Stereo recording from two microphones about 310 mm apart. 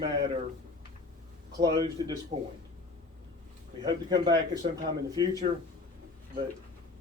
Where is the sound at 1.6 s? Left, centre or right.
Centre.